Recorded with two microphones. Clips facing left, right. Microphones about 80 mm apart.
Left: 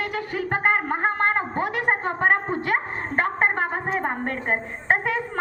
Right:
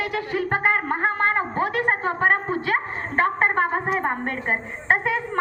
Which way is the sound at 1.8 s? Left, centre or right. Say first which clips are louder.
Left 2 dB; centre.